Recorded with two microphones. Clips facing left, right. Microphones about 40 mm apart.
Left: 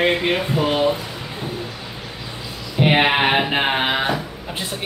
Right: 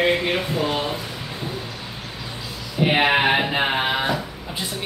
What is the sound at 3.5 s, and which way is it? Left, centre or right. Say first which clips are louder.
Speech: left 2 dB; left.